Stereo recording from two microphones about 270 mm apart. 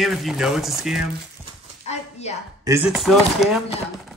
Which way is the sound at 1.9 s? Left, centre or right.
Left.